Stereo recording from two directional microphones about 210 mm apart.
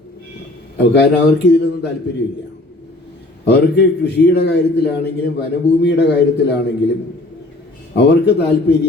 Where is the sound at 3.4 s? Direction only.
50° left (ahead or behind).